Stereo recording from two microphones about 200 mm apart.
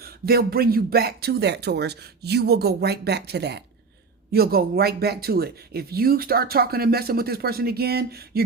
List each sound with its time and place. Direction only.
0.0 s speech: 50° right (ahead or behind)